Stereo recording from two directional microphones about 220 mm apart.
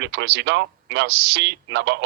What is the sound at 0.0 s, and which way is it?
A man's voice, 50° right (ahead or behind).